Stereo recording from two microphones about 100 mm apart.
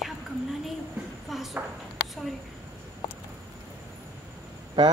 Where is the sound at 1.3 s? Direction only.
Centre (ahead or behind).